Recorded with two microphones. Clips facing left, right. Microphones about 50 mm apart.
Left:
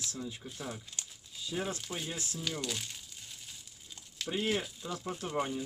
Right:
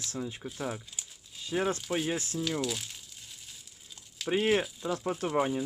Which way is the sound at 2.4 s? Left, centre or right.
Centre.